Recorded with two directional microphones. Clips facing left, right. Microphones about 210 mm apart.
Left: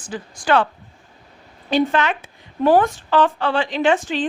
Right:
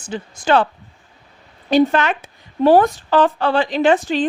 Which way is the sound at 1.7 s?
45° right (ahead or behind).